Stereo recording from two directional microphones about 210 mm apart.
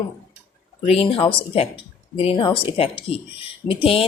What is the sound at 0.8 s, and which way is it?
Speech, 25° left (ahead or behind).